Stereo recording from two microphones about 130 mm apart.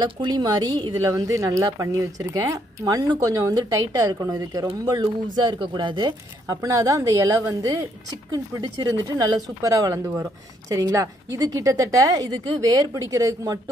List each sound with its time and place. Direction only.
0.0 s speech: 35° right (ahead or behind)